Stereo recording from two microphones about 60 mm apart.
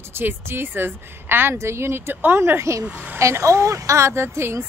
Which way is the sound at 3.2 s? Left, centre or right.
Right.